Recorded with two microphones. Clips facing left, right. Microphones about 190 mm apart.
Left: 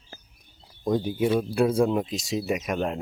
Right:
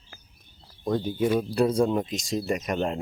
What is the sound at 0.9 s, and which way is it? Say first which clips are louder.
Speech: left 1 dB; 10° left (ahead or behind).